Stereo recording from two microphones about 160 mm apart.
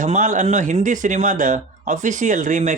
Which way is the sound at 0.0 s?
55° right (ahead or behind).